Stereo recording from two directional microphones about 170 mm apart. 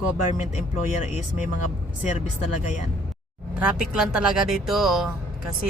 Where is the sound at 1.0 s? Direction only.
45° left (ahead or behind).